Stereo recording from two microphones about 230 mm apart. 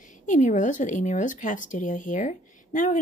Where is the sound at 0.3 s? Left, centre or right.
Left.